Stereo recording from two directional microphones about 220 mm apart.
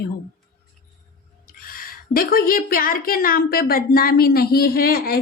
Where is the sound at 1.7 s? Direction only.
40° left (ahead or behind).